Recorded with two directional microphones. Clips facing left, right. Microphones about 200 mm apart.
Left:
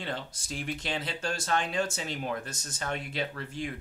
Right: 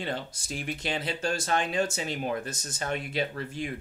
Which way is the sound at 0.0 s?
15° right (ahead or behind).